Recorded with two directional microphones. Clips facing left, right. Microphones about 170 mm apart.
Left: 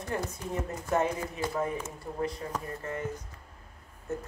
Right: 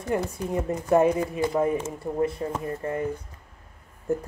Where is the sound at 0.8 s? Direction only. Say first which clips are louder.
Right 9 dB; 30° right (ahead or behind).